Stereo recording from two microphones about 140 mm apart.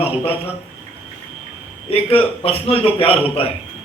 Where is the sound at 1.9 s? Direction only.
45° left (ahead or behind).